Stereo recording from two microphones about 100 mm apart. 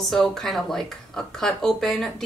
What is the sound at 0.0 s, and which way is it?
A woman's voice, 5° left (ahead or behind).